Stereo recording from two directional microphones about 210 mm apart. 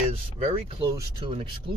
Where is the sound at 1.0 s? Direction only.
25° right (ahead or behind).